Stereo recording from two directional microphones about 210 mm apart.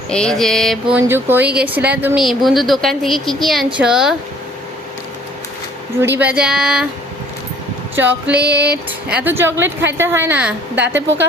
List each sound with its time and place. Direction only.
0.1 s speech: 5° left (ahead or behind)
6.0 s speech: 10° right (ahead or behind)
7.9 s a woman's voice: 10° right (ahead or behind)
10.8 s speech: 60° right (ahead or behind)